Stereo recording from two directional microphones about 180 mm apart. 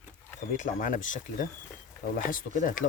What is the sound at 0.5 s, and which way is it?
Speech, 45° left (ahead or behind).